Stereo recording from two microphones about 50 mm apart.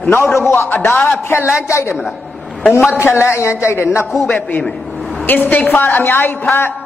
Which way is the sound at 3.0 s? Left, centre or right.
Left.